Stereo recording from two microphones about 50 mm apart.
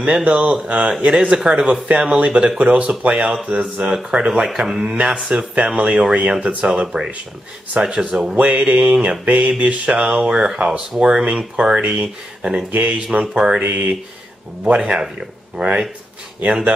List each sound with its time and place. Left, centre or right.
0.2 s speech: right
3.9 s speech: centre
4.9 s speech: right
8.9 s speech: centre
9.2 s mantra: right
9.6 s speech: right
12.7 s speech: right
13.6 s speech: right
14.6 s speech: centre